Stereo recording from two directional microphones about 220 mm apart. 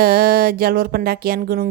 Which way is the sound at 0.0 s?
45° right (ahead or behind).